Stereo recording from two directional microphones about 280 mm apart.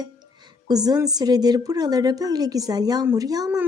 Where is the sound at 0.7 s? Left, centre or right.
Centre.